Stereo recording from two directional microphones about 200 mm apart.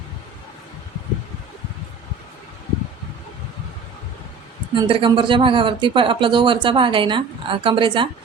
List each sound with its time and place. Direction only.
4.7 s speech: 25° right (ahead or behind)